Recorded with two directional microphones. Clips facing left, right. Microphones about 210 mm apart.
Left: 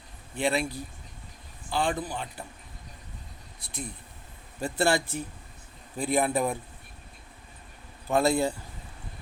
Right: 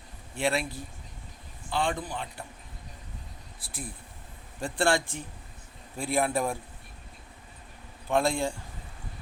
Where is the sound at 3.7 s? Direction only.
5° right (ahead or behind).